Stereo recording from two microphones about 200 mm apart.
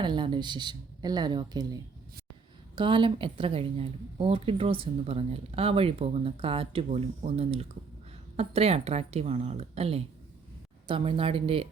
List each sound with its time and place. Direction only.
0.0 s a woman's voice: 25° right (ahead or behind)